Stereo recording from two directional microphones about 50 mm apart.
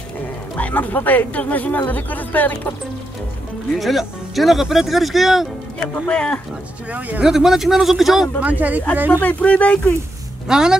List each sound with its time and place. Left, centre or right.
0.6 s speech: left
3.7 s speech: centre
5.8 s speech: left
6.9 s speech: right
7.2 s speech: centre
8.4 s speech: right
9.2 s speech: left
10.5 s a woman's voice: centre